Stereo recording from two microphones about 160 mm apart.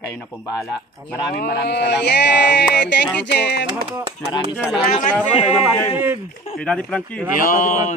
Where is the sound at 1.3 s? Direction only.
85° left.